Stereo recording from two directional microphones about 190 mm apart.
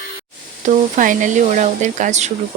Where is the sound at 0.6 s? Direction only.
40° right (ahead or behind).